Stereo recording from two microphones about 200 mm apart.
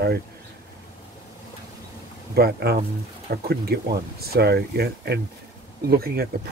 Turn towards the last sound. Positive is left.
turn(degrees=-50)  # may be behind; listen again after turning